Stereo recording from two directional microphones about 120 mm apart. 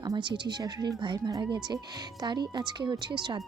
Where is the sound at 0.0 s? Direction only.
40° right (ahead or behind).